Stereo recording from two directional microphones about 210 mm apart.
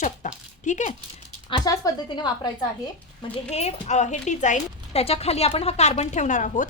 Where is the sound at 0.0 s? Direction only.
35° left (ahead or behind).